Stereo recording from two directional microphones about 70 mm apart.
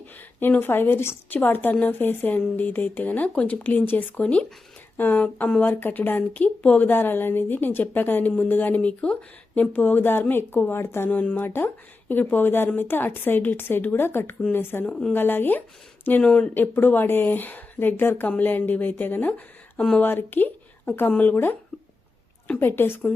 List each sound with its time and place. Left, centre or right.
0.3 s a woman's voice: left
11.1 s a woman's voice: centre
11.3 s a woman's voice: left
16.2 s speech: centre
16.6 s a woman's voice: left
22.4 s a woman's voice: left